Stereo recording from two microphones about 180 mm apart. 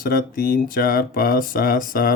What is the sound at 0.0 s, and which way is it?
Speech, 55° left (ahead or behind).